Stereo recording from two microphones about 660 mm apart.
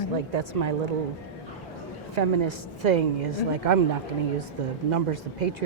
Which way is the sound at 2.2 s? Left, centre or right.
Right.